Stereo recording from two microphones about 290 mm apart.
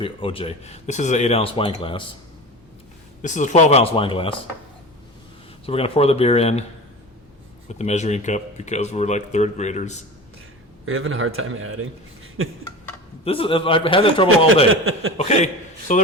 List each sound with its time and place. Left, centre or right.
0.0 s speech: centre
3.2 s speech: left
5.6 s speech: centre
7.7 s speech: left
10.8 s a man's voice: right
13.2 s a man's voice: centre
14.7 s a man's voice: right
15.2 s speech: left